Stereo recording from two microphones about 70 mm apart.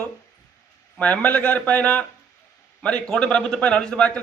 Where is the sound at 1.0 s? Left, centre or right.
Left.